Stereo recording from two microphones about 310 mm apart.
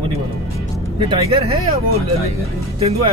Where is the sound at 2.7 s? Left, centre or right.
Centre.